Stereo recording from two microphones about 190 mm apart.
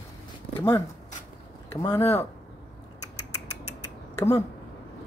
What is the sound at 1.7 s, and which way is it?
Speech, 15° left (ahead or behind).